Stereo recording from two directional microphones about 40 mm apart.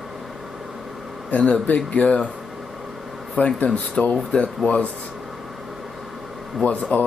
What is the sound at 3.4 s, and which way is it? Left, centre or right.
Speech, left.